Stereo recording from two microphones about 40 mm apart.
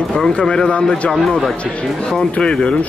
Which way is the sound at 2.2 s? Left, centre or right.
Centre.